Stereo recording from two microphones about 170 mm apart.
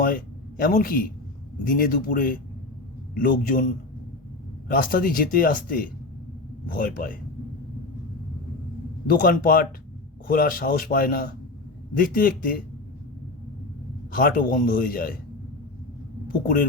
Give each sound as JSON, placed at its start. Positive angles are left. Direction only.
{"t": 0.0, "sound": "speech", "side_deg": 60}
{"t": 4.7, "sound": "speech", "side_deg": 55}
{"t": 9.0, "sound": "speech", "side_deg": 55}
{"t": 14.1, "sound": "speech", "side_deg": 55}